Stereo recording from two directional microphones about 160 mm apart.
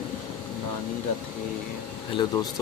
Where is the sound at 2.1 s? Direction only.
25° left (ahead or behind).